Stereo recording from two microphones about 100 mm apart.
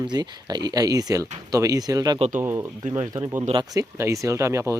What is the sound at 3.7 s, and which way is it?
Speech, 30° right (ahead or behind).